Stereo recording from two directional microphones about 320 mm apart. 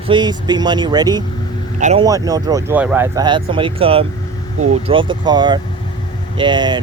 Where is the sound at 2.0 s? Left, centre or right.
Centre.